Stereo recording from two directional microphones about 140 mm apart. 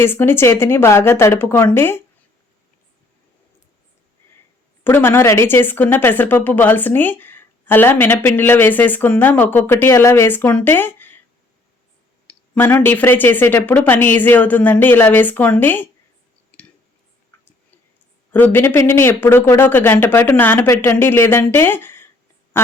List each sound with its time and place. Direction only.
0.0 s speech: 15° left (ahead or behind)
4.8 s speech: 15° left (ahead or behind)
12.3 s speech: 15° left (ahead or behind)
16.5 s clicking: 10° left (ahead or behind)
18.3 s speech: 10° left (ahead or behind)